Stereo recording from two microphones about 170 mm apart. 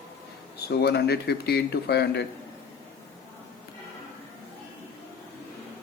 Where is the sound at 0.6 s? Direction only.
75° left (ahead or behind).